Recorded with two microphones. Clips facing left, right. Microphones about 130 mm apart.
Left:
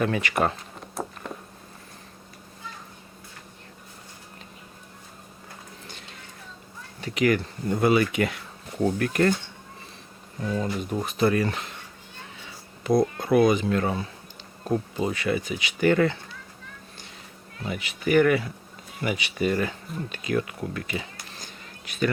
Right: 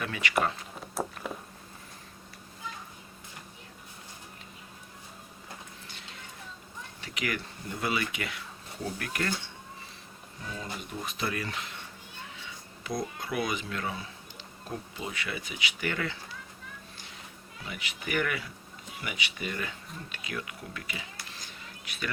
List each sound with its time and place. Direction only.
0.0 s speech: 40° left (ahead or behind)
0.9 s walk: centre (ahead or behind)
7.0 s speech: 40° left (ahead or behind)
10.6 s speech: 45° left (ahead or behind)
12.8 s speech: 55° left (ahead or behind)
17.7 s speech: 40° left (ahead or behind)
20.1 s a sound: 40° left (ahead or behind)